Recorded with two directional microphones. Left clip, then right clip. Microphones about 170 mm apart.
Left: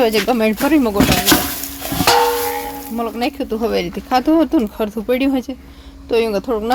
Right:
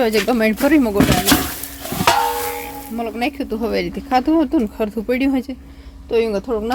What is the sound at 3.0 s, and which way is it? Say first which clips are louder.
Speech: left 2 dB; 5° left (ahead or behind).